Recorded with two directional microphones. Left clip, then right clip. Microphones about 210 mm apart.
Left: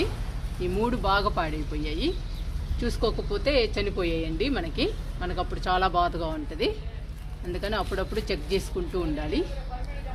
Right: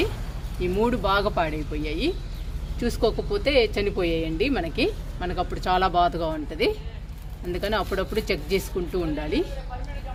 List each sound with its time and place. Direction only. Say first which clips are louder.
0.6 s speech: right 3 dB; 35° right (ahead or behind)